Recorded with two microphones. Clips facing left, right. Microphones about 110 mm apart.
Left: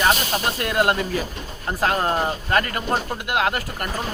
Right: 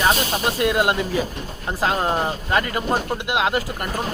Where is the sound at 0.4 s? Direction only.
15° right (ahead or behind).